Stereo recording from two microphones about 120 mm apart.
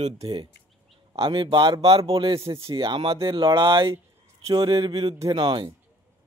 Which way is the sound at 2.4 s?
25° right (ahead or behind).